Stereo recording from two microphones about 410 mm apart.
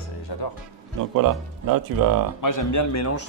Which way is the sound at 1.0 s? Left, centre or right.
Right.